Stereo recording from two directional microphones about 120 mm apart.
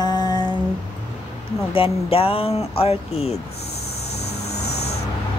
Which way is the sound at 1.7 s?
50° left (ahead or behind).